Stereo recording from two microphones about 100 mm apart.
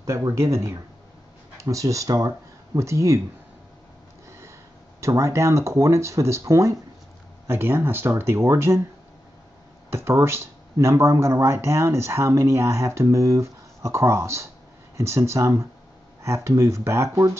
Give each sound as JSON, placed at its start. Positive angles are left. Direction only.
{"t": 0.0, "sound": "speech", "side_deg": -30}
{"t": 5.0, "sound": "speech", "side_deg": -30}
{"t": 9.8, "sound": "speech", "side_deg": -25}